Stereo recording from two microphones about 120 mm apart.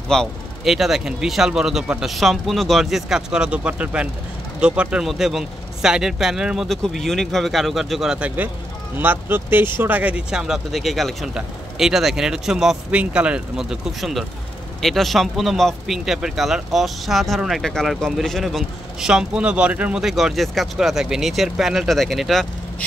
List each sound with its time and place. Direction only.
0.1 s speech: centre (ahead or behind)